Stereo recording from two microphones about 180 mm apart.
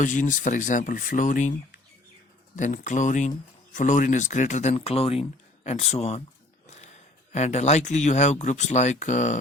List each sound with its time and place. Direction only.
0.0 s speech: 45° left (ahead or behind)
6.7 s a sound: 40° left (ahead or behind)
7.3 s speech: 40° left (ahead or behind)